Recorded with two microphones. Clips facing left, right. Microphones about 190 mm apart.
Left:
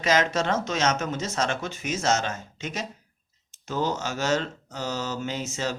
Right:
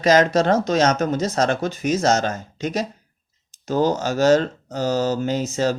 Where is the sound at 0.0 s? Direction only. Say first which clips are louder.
Right 8 dB; 35° right (ahead or behind).